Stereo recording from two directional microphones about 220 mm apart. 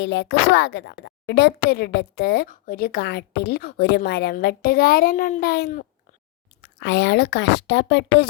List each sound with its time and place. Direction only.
0.0 s a woman's voice: 50° left (ahead or behind)
6.6 s a woman's voice: 50° left (ahead or behind)